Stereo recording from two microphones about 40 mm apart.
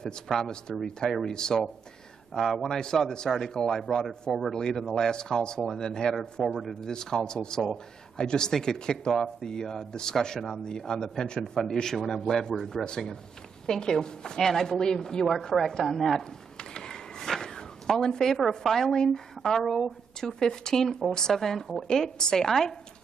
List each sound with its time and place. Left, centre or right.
0.3 s a man's voice: centre
0.8 s a man's voice: centre
3.8 s a man's voice: centre
6.4 s a man's voice: centre
6.7 s a man's voice: centre
16.7 s a sound: centre
18.6 s a man's voice: centre